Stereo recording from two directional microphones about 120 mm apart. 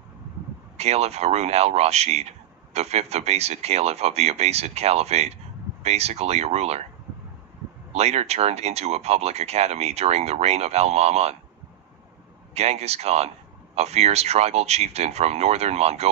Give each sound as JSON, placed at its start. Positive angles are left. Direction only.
{"t": 0.7, "sound": "a man's voice", "side_deg": -60}
{"t": 7.9, "sound": "a man's voice", "side_deg": -60}
{"t": 12.5, "sound": "a man's voice", "side_deg": -65}